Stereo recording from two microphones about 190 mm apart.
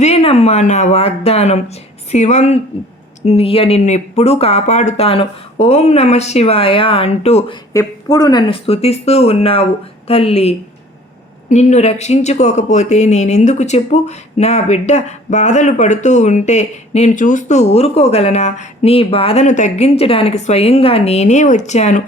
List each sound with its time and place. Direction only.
0.0 s speech: 35° left (ahead or behind)
7.7 s speech: 15° left (ahead or behind); by 22.0 s 40° left (ahead or behind)